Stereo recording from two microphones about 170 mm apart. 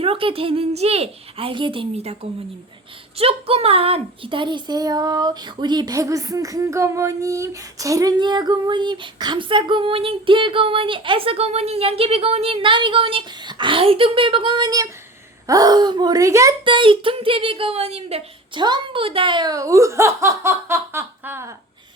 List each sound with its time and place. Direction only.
0.0 s speech: 30° right (ahead or behind)
3.2 s speech: 35° right (ahead or behind); by 21.5 s 15° right (ahead or behind)